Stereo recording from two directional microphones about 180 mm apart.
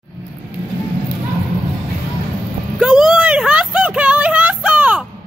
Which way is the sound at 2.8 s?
Centre (ahead or behind).